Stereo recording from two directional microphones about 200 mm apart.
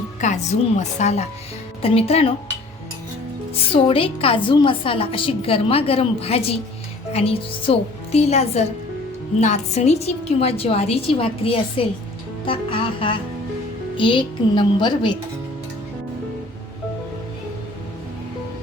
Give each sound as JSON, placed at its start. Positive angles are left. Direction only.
{"t": 0.2, "sound": "a woman's voice", "side_deg": 35}
{"t": 3.7, "sound": "a woman's voice", "side_deg": 30}